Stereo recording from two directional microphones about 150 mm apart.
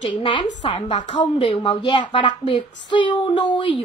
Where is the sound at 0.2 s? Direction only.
30° left (ahead or behind).